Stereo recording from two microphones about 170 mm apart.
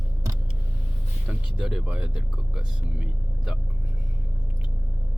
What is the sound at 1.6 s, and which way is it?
Speech, 5° right (ahead or behind).